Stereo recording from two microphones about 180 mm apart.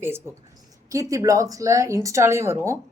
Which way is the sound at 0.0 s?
15° right (ahead or behind).